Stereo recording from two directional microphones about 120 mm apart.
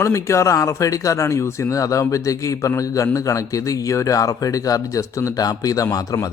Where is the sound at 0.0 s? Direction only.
25° left (ahead or behind).